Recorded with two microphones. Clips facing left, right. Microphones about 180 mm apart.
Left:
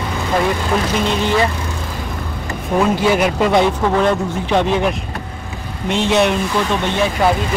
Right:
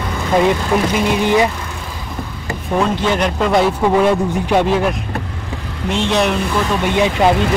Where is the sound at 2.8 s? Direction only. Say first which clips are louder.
Left 4 dB; 5° left (ahead or behind).